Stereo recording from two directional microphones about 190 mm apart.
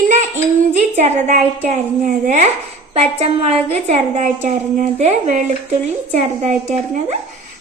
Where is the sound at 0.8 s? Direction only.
35° right (ahead or behind).